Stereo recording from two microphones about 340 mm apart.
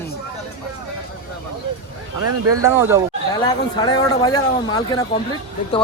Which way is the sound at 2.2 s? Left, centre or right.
Right.